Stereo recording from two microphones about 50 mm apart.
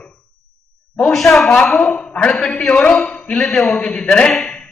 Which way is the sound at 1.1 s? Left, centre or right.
Centre.